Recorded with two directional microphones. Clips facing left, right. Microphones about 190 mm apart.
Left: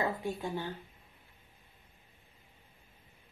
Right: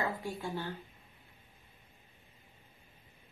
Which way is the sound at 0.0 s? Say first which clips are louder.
Left 3 dB; 20° left (ahead or behind).